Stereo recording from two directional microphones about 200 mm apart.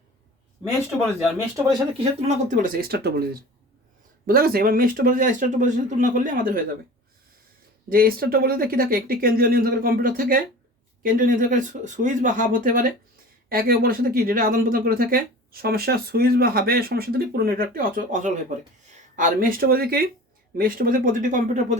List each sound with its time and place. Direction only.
2.0 s speech: 35° right (ahead or behind)
4.3 s speech: 50° right (ahead or behind)
7.9 s speech: 45° right (ahead or behind)